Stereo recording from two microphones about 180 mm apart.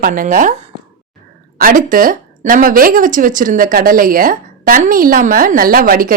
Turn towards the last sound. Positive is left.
turn(degrees=-50)  # may be behind; listen again after turning